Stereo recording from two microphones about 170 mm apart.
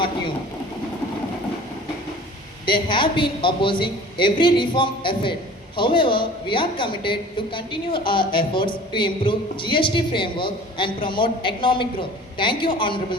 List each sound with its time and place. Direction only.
2.6 s a woman's voice: 30° left (ahead or behind)